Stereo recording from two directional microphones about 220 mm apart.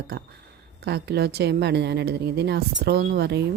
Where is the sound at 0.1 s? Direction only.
45° right (ahead or behind).